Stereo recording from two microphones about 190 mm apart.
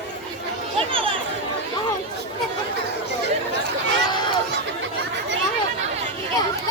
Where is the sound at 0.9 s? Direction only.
30° right (ahead or behind).